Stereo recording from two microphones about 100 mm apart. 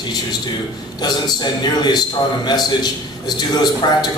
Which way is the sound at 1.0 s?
45° left (ahead or behind).